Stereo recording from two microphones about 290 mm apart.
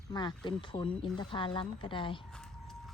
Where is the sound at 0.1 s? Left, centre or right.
Centre.